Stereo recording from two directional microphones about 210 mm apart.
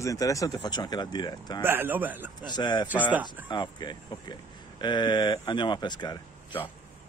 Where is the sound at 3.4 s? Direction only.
20° left (ahead or behind).